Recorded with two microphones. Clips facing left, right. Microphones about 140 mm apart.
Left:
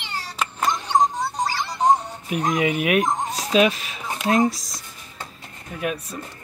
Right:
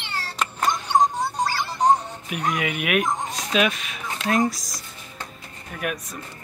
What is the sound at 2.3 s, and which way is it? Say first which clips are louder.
Speech: left 5 dB; 30° left (ahead or behind).